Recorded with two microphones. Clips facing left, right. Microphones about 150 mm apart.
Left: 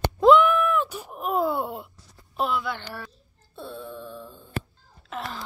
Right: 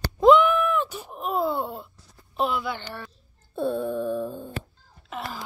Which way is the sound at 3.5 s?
50° right (ahead or behind).